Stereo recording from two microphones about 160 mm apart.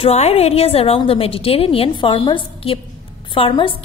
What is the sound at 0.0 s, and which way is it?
A woman's voice, 40° left (ahead or behind).